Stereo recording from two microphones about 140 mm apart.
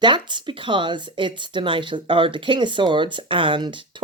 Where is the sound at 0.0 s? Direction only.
35° right (ahead or behind).